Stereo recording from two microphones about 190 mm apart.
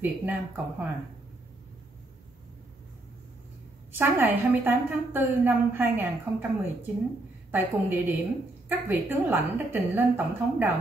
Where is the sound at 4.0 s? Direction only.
10° right (ahead or behind).